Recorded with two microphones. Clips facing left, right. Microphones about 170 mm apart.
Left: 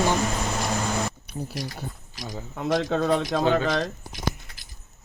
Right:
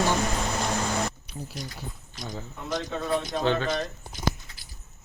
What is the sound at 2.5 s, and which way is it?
Speech, 80° left.